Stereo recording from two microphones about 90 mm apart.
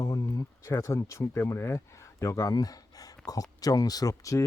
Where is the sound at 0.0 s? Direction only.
40° left (ahead or behind).